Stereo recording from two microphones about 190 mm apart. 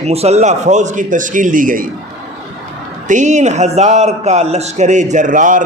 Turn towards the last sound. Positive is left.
turn(degrees=-45)  # may be behind; listen again after turning